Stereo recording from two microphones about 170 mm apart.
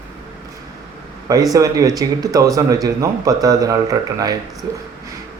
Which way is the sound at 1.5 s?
20° right (ahead or behind).